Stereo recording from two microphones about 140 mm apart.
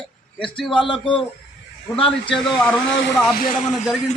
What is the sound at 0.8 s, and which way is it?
Speech, 35° left (ahead or behind).